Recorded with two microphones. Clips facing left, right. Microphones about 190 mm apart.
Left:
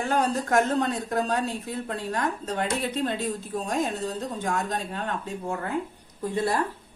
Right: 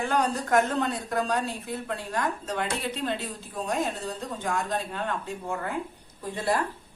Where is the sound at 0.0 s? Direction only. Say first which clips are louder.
Left 1 dB; 45° left (ahead or behind).